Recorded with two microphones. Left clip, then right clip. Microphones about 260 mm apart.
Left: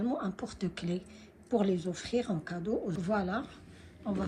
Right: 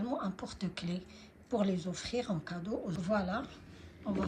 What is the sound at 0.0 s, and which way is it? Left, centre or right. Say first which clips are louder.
A woman's voice: left 3 dB; right.